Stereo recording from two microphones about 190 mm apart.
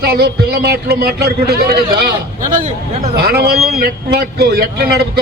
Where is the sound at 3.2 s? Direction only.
55° right (ahead or behind).